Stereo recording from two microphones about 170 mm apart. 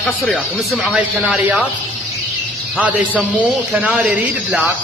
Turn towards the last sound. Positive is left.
turn(degrees=-5)  # may be behind; listen again after turning